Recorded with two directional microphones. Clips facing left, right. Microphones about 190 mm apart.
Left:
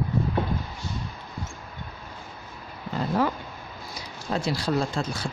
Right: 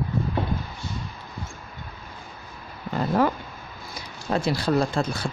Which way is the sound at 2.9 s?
55° right (ahead or behind).